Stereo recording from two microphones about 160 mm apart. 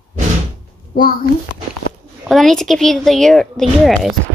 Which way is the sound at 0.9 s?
65° left (ahead or behind).